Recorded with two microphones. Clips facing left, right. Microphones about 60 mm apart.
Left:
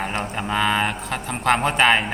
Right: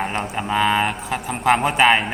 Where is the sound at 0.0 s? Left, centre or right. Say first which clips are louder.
Right 2 dB; centre.